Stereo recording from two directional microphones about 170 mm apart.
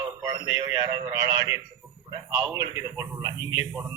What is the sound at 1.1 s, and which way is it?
A man's voice, 20° right (ahead or behind).